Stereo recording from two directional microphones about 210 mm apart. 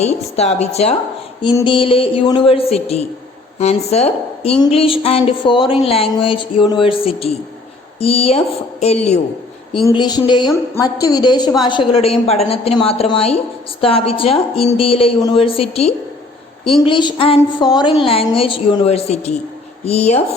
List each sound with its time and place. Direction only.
0.0 s a woman's voice: 30° left (ahead or behind)
9.8 s a woman's voice: 20° left (ahead or behind)